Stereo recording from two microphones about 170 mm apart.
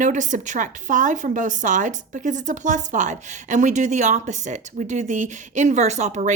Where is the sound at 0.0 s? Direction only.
45° right (ahead or behind).